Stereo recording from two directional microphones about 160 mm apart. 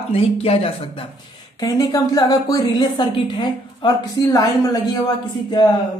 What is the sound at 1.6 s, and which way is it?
A woman's voice, 20° left (ahead or behind).